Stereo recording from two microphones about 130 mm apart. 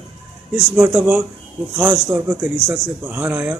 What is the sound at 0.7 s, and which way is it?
Speech, 15° right (ahead or behind).